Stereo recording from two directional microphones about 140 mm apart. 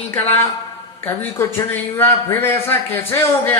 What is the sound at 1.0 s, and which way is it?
A man's voice, 15° left (ahead or behind).